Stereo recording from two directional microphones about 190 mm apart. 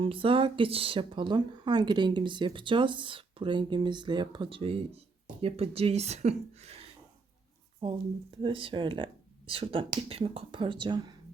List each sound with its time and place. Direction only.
0.0 s speech: 30° right (ahead or behind)
7.8 s speech: 30° right (ahead or behind)